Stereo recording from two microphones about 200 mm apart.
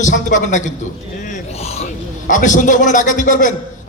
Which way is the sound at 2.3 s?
40° left (ahead or behind).